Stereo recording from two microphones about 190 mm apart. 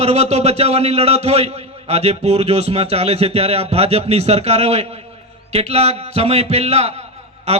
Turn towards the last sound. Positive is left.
turn(degrees=-35)  # may be behind; listen again after turning